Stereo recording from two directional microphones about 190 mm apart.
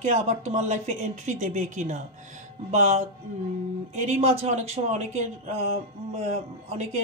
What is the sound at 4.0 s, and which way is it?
A woman's voice, 35° right (ahead or behind).